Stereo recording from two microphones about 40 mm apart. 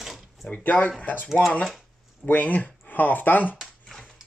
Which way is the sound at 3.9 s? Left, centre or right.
Centre.